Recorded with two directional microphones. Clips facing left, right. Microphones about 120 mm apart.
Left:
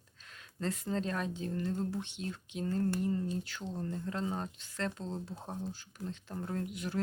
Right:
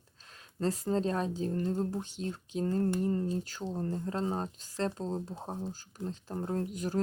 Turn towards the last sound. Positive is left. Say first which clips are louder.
# right 4 dB
turn(degrees=-40)  # may be behind; listen again after turning